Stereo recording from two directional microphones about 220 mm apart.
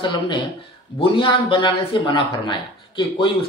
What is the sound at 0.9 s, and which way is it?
A man's voice, 25° left (ahead or behind).